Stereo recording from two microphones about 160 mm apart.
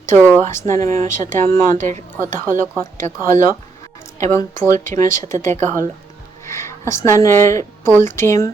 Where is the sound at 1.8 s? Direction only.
55° right (ahead or behind).